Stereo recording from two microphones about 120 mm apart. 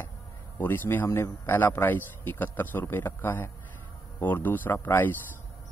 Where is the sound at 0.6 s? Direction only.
15° left (ahead or behind).